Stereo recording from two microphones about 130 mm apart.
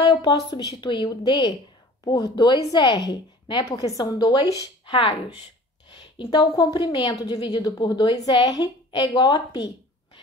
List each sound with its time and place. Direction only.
0.0 s a woman's voice: 35° left (ahead or behind)